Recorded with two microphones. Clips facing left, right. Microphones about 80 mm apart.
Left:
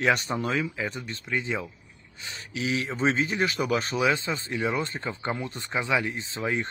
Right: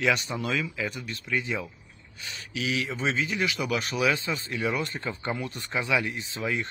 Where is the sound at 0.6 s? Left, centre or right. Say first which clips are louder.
Left 1 dB; left.